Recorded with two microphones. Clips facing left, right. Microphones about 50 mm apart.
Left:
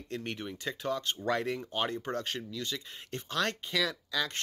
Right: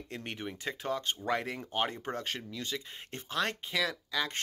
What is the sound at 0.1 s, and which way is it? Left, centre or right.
Speech, right.